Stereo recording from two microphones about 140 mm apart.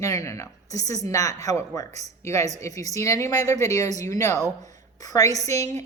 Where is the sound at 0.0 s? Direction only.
25° left (ahead or behind).